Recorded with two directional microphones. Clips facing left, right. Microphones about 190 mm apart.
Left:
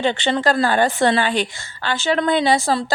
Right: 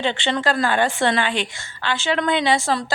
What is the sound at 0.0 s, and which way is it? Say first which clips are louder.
A woman's voice: left 3 dB; 40° left (ahead or behind).